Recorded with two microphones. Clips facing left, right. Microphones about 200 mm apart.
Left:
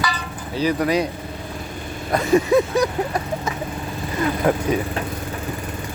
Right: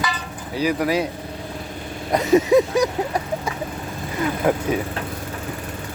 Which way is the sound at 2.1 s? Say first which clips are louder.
Right 1 dB; 20° right (ahead or behind).